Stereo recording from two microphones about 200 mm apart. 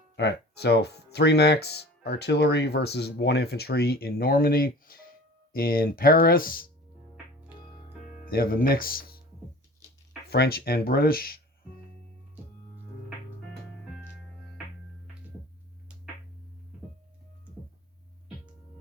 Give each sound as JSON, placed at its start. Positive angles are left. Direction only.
{"t": 0.2, "sound": "speech", "side_deg": 55}
{"t": 8.2, "sound": "speech", "side_deg": 45}
{"t": 10.2, "sound": "speech", "side_deg": 55}